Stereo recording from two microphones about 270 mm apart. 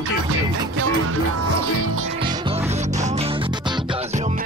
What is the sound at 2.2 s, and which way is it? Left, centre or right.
Music, centre.